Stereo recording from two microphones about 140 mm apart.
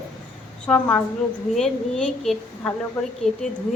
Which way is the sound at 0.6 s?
5° left (ahead or behind).